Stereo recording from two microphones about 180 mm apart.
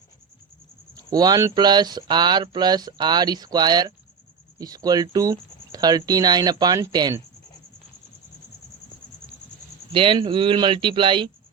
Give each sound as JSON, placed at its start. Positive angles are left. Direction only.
{"t": 0.9, "sound": "speech", "side_deg": -20}
{"t": 9.9, "sound": "speech", "side_deg": -30}